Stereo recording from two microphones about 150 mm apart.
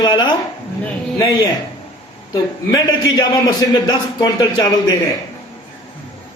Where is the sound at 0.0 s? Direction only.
30° left (ahead or behind).